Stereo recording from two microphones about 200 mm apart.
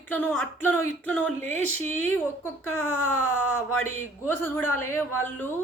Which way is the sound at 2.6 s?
90° left.